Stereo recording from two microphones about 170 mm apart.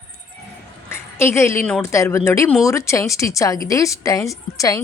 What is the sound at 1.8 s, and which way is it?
A woman's voice, 15° left (ahead or behind).